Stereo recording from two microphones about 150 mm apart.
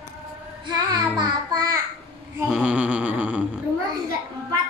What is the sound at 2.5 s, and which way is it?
Speech, 5° right (ahead or behind).